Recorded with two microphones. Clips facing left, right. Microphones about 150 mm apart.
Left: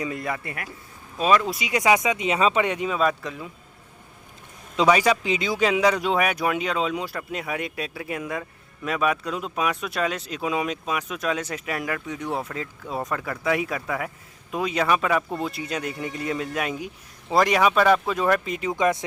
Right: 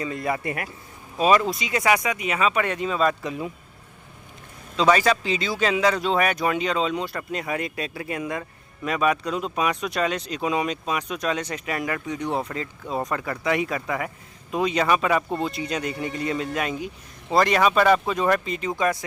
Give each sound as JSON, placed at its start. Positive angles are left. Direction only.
{"t": 0.3, "sound": "a man's voice", "side_deg": -25}
{"t": 1.2, "sound": "speech", "side_deg": -5}
{"t": 1.5, "sound": "speech", "side_deg": 15}
{"t": 2.6, "sound": "speech", "side_deg": 10}
{"t": 4.9, "sound": "speech", "side_deg": 15}